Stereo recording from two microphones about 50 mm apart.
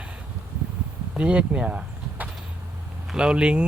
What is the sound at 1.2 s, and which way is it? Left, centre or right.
Speech, right.